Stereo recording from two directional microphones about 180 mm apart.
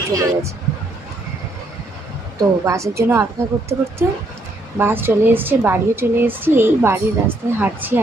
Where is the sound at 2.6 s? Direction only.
15° right (ahead or behind).